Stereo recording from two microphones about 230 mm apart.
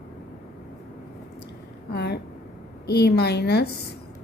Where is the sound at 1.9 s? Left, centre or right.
Left.